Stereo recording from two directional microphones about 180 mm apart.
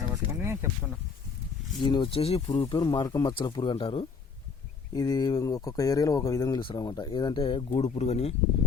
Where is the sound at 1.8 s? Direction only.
25° left (ahead or behind).